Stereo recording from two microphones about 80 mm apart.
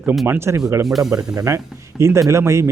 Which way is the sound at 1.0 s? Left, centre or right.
Right.